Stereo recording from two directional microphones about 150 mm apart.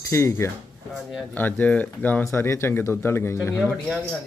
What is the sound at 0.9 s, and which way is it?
Speech, 5° right (ahead or behind).